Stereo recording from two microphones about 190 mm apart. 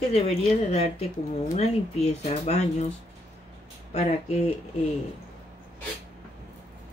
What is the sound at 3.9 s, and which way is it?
Speech, 35° left (ahead or behind).